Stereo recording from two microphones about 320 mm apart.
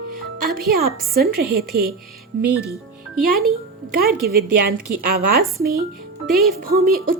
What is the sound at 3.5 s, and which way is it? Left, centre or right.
Speech, right.